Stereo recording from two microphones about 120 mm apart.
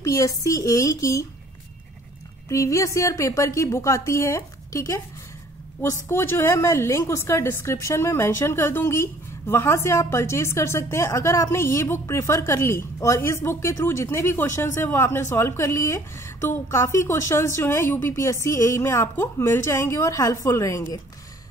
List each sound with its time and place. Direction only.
0.0 s a woman's voice: 25° left (ahead or behind)
2.5 s a woman's voice: 25° left (ahead or behind)
6.0 s a woman's voice: 20° left (ahead or behind)